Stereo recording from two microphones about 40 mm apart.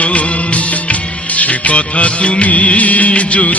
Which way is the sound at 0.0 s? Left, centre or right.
Left.